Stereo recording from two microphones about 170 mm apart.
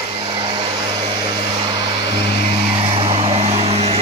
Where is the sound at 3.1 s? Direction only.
35° right (ahead or behind).